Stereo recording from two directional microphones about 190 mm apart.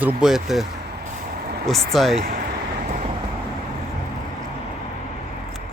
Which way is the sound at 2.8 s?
40° right (ahead or behind).